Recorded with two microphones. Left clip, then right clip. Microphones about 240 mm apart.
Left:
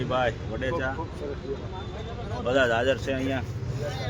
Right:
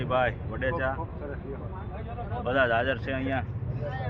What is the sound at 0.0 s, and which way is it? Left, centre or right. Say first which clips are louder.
Speech: even; left.